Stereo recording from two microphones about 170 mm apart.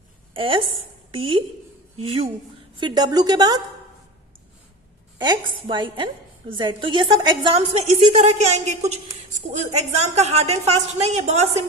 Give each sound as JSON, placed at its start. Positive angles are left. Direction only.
{"t": 0.3, "sound": "a woman's voice", "side_deg": -30}
{"t": 2.7, "sound": "a woman's voice", "side_deg": -25}
{"t": 5.2, "sound": "a woman's voice", "side_deg": -25}
{"t": 7.8, "sound": "a woman's voice", "side_deg": -45}